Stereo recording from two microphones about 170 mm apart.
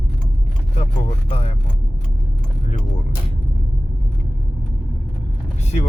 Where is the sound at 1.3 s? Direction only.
35° left (ahead or behind).